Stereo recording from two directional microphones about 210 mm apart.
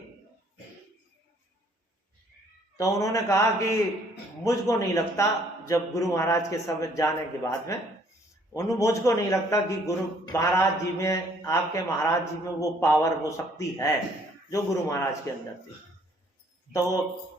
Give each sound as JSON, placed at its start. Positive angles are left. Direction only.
{"t": 2.7, "sound": "a man's voice", "side_deg": 15}